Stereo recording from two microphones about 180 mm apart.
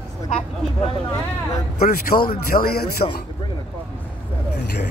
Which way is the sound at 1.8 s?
55° left (ahead or behind).